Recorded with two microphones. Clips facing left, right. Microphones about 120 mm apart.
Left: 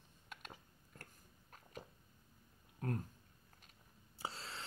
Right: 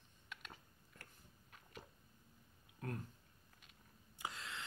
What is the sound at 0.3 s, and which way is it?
Mechanisms, 40° left (ahead or behind).